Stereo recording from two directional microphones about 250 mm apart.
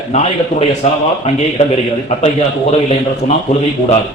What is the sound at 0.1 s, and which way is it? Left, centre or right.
A man's voice, left.